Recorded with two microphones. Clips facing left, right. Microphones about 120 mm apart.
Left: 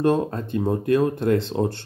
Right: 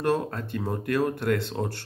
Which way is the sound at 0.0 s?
20° left (ahead or behind).